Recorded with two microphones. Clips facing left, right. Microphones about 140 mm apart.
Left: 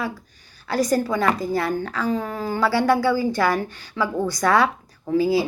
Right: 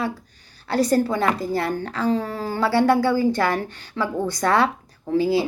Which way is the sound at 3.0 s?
25° right (ahead or behind).